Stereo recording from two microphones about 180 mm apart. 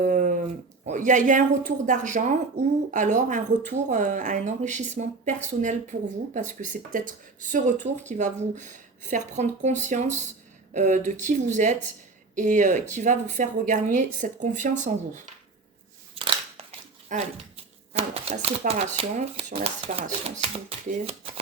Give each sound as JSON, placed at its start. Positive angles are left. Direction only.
{"t": 0.0, "sound": "a sound", "side_deg": -45}
{"t": 0.9, "sound": "speech", "side_deg": -45}
{"t": 16.1, "sound": "scissors", "side_deg": -30}
{"t": 17.1, "sound": "speech", "side_deg": -35}